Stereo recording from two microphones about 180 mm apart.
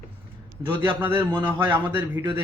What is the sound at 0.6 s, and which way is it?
Speech, 25° right (ahead or behind).